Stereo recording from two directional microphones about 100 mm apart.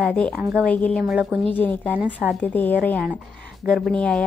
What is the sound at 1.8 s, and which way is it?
Speech, 15° right (ahead or behind).